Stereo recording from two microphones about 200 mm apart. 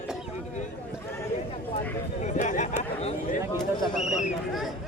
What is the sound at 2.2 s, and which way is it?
Chatter, 40° left (ahead or behind).